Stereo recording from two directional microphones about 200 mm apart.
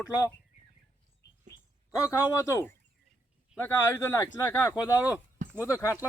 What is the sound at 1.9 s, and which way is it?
Speech, 15° left (ahead or behind).